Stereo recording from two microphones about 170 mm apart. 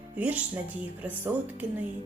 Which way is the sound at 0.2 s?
10° right (ahead or behind).